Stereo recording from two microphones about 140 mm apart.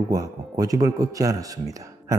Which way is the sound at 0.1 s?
25° right (ahead or behind).